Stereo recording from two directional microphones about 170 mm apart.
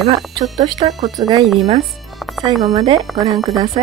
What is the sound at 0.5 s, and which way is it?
Speech, 25° right (ahead or behind).